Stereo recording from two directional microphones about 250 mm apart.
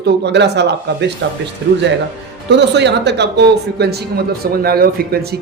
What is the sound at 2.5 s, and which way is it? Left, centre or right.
Speech, right.